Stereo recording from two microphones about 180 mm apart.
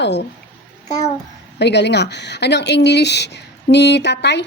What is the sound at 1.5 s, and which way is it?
Speech, 70° left (ahead or behind).